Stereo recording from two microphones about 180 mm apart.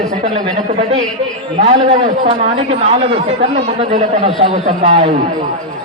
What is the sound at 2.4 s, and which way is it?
A man's voice, 35° right (ahead or behind).